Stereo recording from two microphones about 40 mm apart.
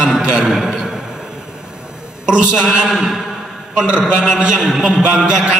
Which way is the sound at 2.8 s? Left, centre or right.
Centre.